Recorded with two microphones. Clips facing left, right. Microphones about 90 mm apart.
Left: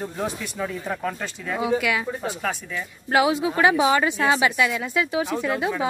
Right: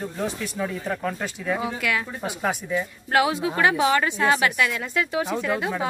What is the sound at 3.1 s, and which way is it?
A woman's voice, 5° left (ahead or behind).